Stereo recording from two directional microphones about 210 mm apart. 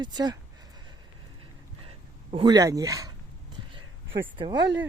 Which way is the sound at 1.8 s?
25° right (ahead or behind).